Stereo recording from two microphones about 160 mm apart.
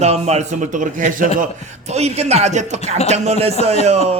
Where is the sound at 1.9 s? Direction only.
40° right (ahead or behind).